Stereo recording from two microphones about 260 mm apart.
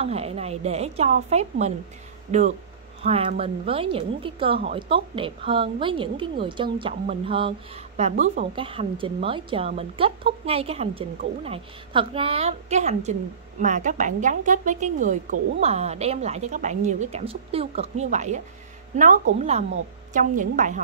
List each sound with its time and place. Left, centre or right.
0.0 s speech: right
3.0 s speech: right